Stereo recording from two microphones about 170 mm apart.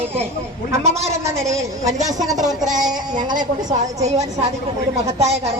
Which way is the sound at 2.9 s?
25° right (ahead or behind).